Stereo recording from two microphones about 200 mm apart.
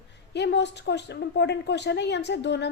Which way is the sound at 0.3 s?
60° left (ahead or behind).